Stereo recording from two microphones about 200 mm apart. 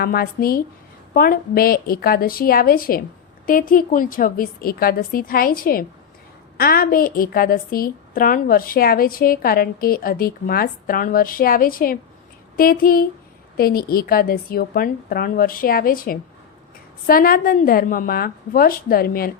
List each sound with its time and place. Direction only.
0.0 s a woman's voice: 50° left (ahead or behind)